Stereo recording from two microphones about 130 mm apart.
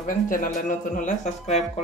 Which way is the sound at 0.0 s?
90° left.